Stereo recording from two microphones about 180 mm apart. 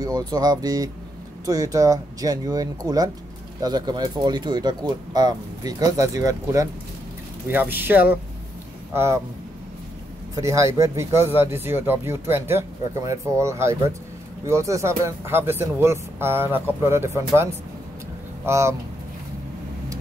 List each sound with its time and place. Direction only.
0.0 s speech: 20° right (ahead or behind)
10.3 s speech: 15° right (ahead or behind)